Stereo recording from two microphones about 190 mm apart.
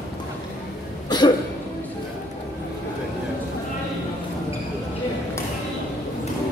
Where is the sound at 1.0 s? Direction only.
20° left (ahead or behind).